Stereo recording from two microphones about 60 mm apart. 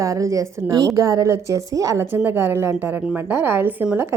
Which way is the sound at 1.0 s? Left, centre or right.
Right.